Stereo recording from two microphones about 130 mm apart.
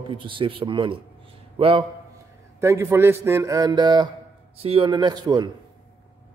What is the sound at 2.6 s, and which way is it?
A man's voice, 20° right (ahead or behind).